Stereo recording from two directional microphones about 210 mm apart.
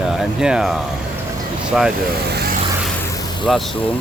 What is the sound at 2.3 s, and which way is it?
Vehicle, 50° right (ahead or behind).